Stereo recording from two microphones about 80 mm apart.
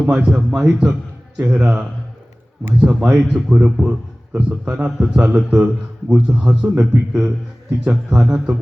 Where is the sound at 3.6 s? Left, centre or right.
Centre.